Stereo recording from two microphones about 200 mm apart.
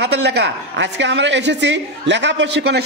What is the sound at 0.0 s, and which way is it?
A woman's voice, 60° right (ahead or behind).